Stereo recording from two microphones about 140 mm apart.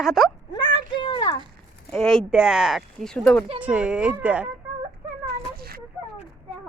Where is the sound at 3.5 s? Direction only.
10° right (ahead or behind).